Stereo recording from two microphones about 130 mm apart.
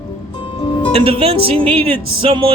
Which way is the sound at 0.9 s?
50° right (ahead or behind).